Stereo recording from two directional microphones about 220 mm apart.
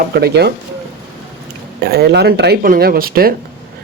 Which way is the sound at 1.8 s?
50° right (ahead or behind).